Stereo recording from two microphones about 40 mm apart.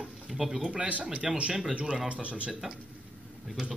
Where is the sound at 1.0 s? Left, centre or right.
Right.